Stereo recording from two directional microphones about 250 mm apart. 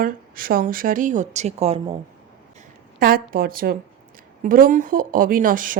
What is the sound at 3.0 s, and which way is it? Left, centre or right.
Speech, right.